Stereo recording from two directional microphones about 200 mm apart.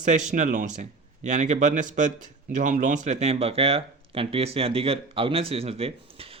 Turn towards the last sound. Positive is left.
turn(degrees=-30)  # may be behind; listen again after turning